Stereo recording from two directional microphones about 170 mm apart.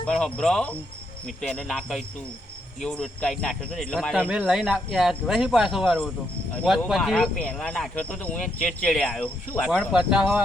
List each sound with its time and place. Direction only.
0.0 s speech: 5° left (ahead or behind)
4.2 s speech: 10° right (ahead or behind); by 9.6 s 10° left (ahead or behind)
9.9 s speech: 5° right (ahead or behind)